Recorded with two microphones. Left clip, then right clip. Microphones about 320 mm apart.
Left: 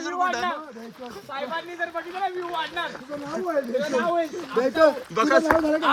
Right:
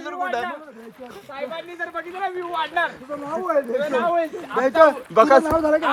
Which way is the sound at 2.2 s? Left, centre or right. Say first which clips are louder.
Right 3 dB; centre.